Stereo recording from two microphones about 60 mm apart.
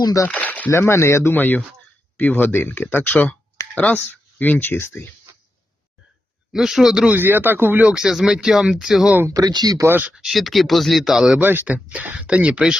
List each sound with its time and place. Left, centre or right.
0.3 s speech: left
0.7 s speech: left
1.3 s speech: left
4.7 s speech: left
6.5 s speech: centre
7.1 s speech: right
7.9 s speech: centre
9.3 s speech: right
9.9 s speech: right
10.2 s speech: centre
11.3 s speech: right
11.6 s speech: right